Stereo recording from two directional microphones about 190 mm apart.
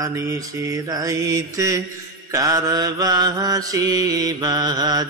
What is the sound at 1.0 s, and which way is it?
Mantra, 20° right (ahead or behind).